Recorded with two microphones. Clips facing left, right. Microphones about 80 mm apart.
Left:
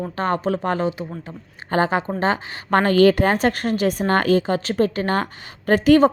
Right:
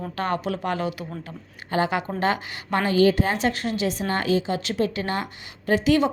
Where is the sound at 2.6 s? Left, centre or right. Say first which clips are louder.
Left 5 dB; left.